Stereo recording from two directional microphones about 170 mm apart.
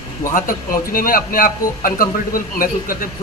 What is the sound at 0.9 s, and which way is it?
A man's voice, 55° left (ahead or behind).